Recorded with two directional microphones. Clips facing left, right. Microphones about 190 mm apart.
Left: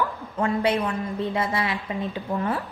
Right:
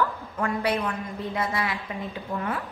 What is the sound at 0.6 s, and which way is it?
A woman's voice, 25° left (ahead or behind).